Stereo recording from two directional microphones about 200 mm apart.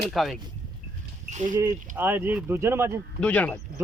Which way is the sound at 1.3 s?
35° right (ahead or behind).